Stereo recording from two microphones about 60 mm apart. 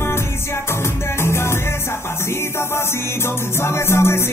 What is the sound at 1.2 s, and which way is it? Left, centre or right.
Music, left.